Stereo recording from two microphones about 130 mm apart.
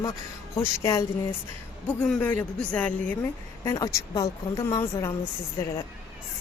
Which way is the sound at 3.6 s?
25° left (ahead or behind).